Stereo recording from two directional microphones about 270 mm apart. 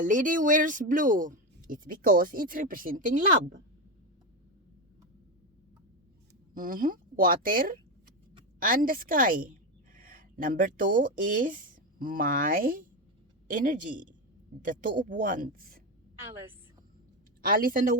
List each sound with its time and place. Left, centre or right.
0.0 s speech: right
6.5 s speech: right
17.4 s speech: right